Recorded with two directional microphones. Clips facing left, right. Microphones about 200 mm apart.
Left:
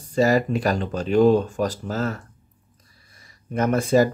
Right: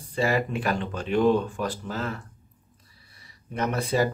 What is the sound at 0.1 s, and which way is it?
Speech, 40° left (ahead or behind).